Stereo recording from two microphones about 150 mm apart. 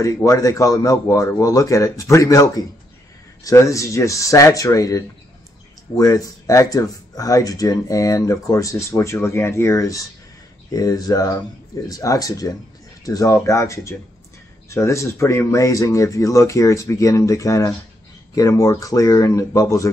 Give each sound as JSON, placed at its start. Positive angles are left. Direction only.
{"t": 0.0, "sound": "speech", "side_deg": 20}